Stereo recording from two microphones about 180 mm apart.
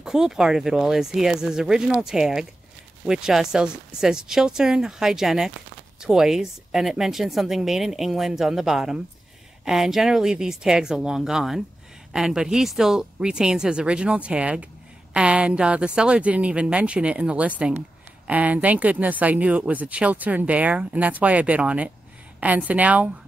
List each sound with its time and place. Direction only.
0.0 s a woman's voice: 5° right (ahead or behind)